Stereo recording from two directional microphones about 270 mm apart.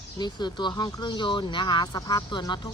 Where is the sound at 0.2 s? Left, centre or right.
Centre.